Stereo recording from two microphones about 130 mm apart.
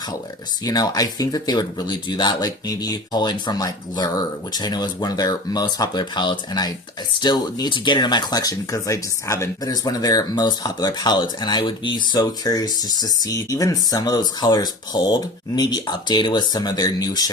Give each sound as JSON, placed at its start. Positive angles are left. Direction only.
{"t": 0.6, "sound": "speech", "side_deg": 30}